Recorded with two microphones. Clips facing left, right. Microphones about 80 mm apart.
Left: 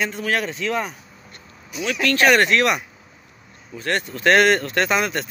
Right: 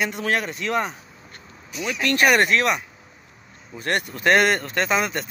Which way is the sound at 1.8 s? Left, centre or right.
Right.